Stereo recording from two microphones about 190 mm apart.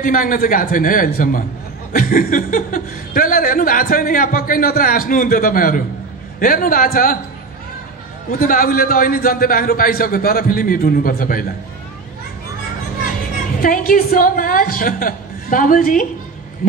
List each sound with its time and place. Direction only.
0.0 s speech: 45° left (ahead or behind)
8.4 s speech: 50° left (ahead or behind)
13.6 s speech: 45° left (ahead or behind)